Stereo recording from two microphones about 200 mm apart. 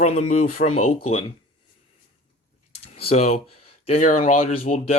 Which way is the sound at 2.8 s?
30° left (ahead or behind).